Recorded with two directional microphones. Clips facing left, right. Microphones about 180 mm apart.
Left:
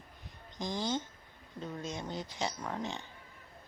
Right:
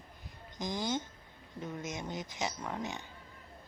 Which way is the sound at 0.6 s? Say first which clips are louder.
Even; 15° right (ahead or behind).